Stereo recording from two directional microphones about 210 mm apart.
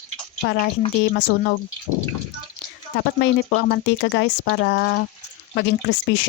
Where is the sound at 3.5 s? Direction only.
55° left (ahead or behind).